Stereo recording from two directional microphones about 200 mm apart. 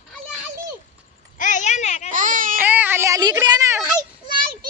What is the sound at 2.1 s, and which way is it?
Baby cry, 40° right (ahead or behind).